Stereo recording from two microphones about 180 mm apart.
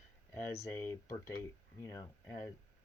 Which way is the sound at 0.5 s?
15° left (ahead or behind).